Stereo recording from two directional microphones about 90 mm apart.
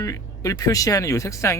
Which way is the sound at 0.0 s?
40° left (ahead or behind).